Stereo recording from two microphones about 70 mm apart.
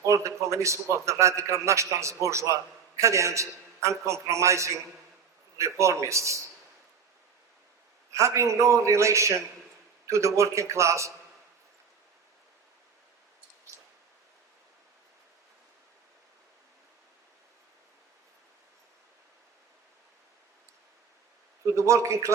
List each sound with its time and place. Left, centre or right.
0.0 s a man's voice: right
8.1 s a man's voice: right
21.8 s a man's voice: right